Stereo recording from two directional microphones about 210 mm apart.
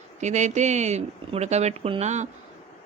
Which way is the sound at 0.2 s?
35° right (ahead or behind).